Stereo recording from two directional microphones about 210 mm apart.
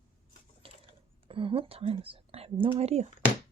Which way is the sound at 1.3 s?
25° right (ahead or behind).